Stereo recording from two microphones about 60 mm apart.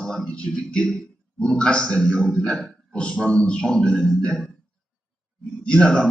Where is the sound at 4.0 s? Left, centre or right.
Centre.